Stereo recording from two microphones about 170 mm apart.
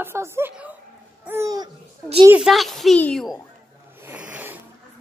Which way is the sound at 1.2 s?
15° right (ahead or behind).